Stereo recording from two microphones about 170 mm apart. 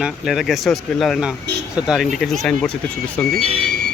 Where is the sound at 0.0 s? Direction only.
Centre (ahead or behind).